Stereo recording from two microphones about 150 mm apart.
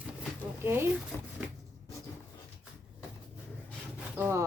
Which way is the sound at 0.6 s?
15° right (ahead or behind).